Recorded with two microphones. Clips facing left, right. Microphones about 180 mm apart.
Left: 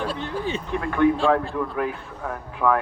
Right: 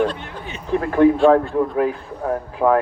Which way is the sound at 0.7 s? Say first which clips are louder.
Right 6 dB; 35° right (ahead or behind).